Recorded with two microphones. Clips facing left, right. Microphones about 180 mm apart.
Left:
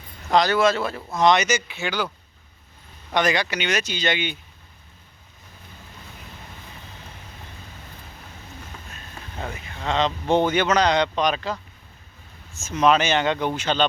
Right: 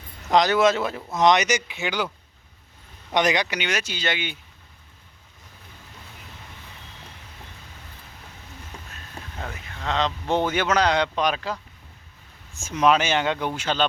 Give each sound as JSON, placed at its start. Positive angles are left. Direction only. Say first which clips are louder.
{"t": 0.3, "sound": "speech", "louder": "even", "side_deg": -20}
{"t": 3.1, "sound": "speech", "louder": "even", "side_deg": -20}
{"t": 9.4, "sound": "speech", "louder": "left 3 dB", "side_deg": 5}